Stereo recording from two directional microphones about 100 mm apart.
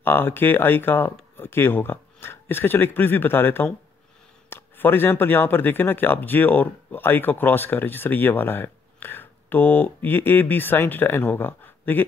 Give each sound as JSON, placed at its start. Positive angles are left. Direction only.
{"t": 0.0, "sound": "speech", "side_deg": 20}